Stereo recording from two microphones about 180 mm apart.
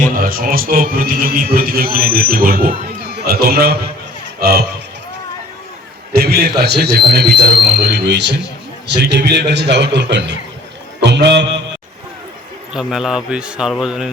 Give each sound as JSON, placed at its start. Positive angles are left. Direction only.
{"t": 0.2, "sound": "a man's voice", "side_deg": -55}
{"t": 6.1, "sound": "a sound", "side_deg": -60}
{"t": 6.6, "sound": "a man's voice", "side_deg": -65}
{"t": 12.7, "sound": "a man's voice", "side_deg": 0}